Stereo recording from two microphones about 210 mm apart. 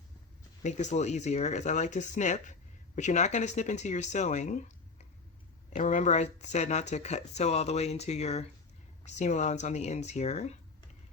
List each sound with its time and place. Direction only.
0.6 s speech: 35° left (ahead or behind)
5.7 s speech: 35° left (ahead or behind)